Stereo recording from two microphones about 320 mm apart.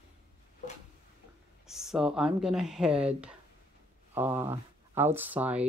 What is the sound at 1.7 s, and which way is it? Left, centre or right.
Speech, centre.